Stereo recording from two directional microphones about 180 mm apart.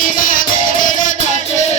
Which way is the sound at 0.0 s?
50° left (ahead or behind).